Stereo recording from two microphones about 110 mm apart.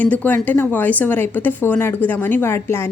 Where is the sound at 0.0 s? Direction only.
15° left (ahead or behind).